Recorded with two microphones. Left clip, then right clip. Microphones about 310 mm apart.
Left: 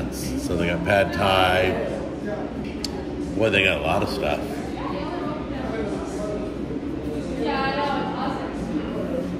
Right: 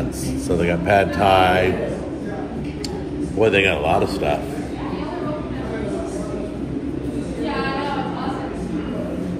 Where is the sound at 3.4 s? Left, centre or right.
Centre.